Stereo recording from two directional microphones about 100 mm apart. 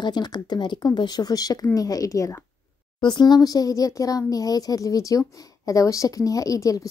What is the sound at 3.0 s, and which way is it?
Speech, 45° left (ahead or behind).